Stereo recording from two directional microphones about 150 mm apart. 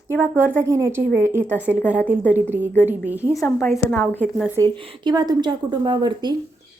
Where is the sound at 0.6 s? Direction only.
20° right (ahead or behind).